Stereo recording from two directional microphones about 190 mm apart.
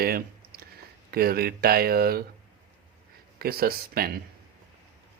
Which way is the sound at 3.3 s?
50° right (ahead or behind).